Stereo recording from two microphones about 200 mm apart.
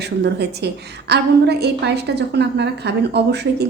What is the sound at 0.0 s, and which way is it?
A woman's voice, 55° right (ahead or behind).